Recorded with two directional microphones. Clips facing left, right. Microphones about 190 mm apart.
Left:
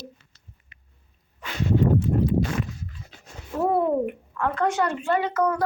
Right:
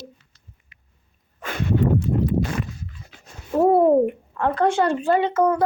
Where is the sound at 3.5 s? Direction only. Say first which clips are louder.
Right 7 dB; 30° right (ahead or behind).